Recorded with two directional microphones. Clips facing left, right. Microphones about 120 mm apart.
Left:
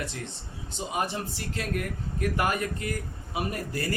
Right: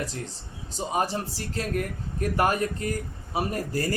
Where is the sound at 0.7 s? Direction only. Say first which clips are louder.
Right 4 dB; 35° right (ahead or behind).